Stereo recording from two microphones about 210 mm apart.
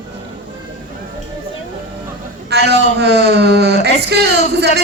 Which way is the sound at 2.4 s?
50° right (ahead or behind).